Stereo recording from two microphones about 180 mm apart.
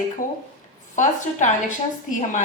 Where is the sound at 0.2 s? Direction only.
45° left (ahead or behind).